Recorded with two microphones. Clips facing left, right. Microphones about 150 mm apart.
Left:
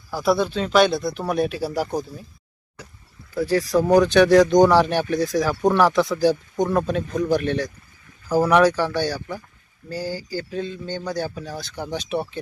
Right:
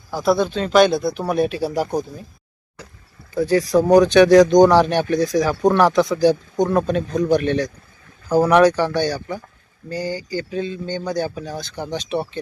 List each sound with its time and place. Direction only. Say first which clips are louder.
0.1 s speech: right 2 dB; 5° left (ahead or behind)
3.3 s speech: right 3 dB; 5° left (ahead or behind)
3.6 s speech: right 3 dB; 20° right (ahead or behind)
4.1 s speech: right 3 dB; 5° left (ahead or behind)
11.3 s speech: right 3 dB; 15° right (ahead or behind)
11.6 s speech: right 2 dB; 5° left (ahead or behind)